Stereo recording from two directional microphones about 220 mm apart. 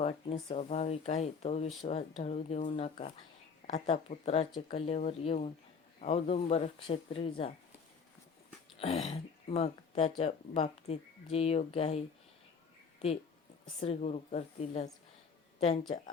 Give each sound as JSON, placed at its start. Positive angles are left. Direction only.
{"t": 0.0, "sound": "speech", "side_deg": 25}
{"t": 8.8, "sound": "speech", "side_deg": 25}
{"t": 13.8, "sound": "speech", "side_deg": 30}